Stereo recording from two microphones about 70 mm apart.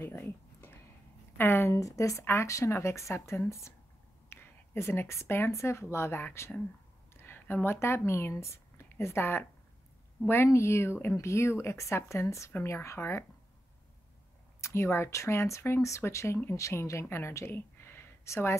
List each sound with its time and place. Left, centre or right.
0.2 s a sound: left
1.4 s speech: left
1.7 s speech: left
14.6 s speech: left